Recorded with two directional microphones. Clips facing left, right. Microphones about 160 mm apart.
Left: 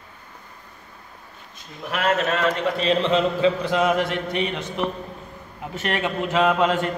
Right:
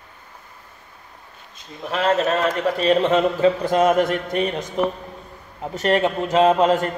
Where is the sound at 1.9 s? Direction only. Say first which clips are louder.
Right 3 dB; 30° right (ahead or behind).